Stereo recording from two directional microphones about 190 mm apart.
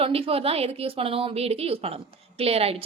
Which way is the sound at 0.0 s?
30° right (ahead or behind).